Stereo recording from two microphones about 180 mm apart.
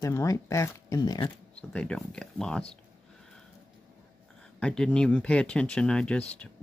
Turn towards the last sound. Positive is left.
turn(degrees=5)  # may be behind; listen again after turning